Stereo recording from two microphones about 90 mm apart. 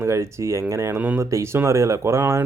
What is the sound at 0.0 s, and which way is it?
Speech, 30° right (ahead or behind).